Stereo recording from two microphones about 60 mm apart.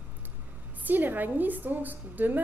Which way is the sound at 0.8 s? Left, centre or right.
Right.